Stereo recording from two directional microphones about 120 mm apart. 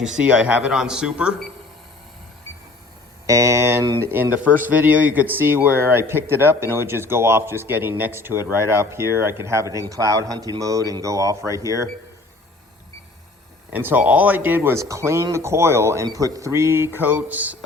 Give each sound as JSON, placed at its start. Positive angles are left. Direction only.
{"t": 0.0, "sound": "speech", "side_deg": -5}
{"t": 3.2, "sound": "speech", "side_deg": -25}
{"t": 13.7, "sound": "speech", "side_deg": -15}